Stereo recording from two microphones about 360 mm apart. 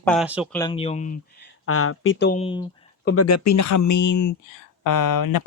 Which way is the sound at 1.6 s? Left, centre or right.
Left.